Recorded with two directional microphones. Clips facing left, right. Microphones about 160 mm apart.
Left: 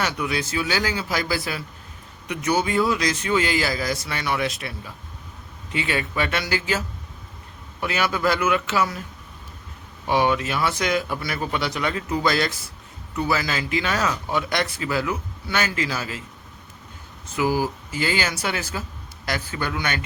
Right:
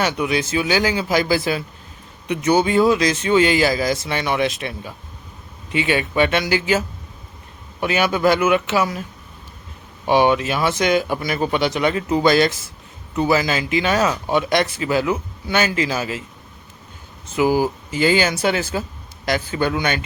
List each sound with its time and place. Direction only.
0.0 s speech: 20° right (ahead or behind)
10.1 s speech: 20° right (ahead or behind)
17.3 s speech: 20° right (ahead or behind)